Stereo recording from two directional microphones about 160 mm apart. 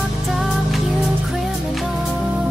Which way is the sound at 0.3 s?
Centre (ahead or behind).